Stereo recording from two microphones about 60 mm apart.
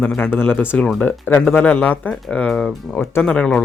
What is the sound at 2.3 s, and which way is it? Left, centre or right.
Speech, centre.